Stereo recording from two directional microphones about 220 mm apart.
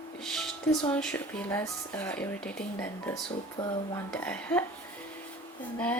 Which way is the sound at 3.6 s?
20° left (ahead or behind).